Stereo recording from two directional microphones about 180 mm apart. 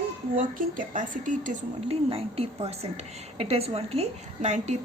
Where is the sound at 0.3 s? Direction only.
45° right (ahead or behind).